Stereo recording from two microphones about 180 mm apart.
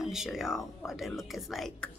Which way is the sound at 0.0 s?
Centre (ahead or behind).